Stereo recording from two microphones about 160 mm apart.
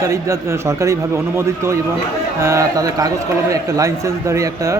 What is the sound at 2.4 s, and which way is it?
A man's voice, 20° right (ahead or behind).